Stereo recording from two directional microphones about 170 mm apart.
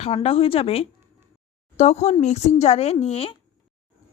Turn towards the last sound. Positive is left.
turn(degrees=35)  # may be behind; listen again after turning